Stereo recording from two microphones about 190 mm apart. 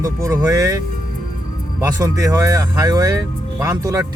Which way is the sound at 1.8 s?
15° right (ahead or behind).